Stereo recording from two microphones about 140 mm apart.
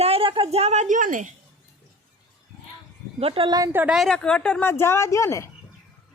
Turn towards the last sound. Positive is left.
turn(degrees=20)  # may be behind; listen again after turning